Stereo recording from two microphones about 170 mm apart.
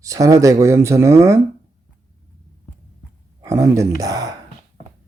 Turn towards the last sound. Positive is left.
turn(degrees=-20)  # may be behind; listen again after turning